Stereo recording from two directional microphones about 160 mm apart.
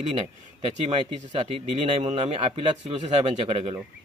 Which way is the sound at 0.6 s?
40° right (ahead or behind).